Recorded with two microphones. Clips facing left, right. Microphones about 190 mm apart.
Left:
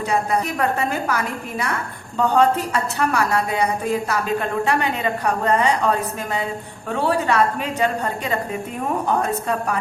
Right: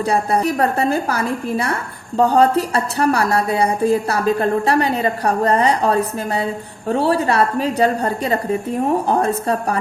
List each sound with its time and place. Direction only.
0.0 s a woman's voice: 35° right (ahead or behind)